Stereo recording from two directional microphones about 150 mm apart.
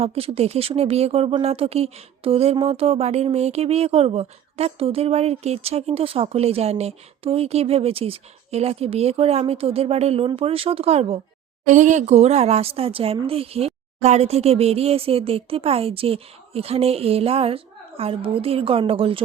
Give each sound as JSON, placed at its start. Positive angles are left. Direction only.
{"t": 0.0, "sound": "speech", "side_deg": -40}
{"t": 11.7, "sound": "speech", "side_deg": -55}